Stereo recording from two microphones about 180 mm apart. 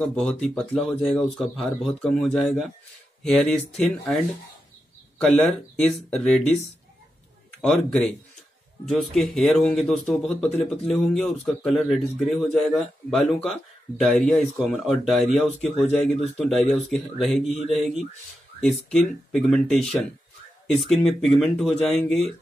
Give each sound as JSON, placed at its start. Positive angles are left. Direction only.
{"t": 0.0, "sound": "speech", "side_deg": 5}
{"t": 5.2, "sound": "speech", "side_deg": 5}
{"t": 7.6, "sound": "speech", "side_deg": 5}